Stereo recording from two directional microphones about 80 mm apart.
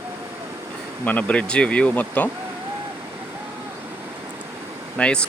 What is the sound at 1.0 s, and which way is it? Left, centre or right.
Speech, centre.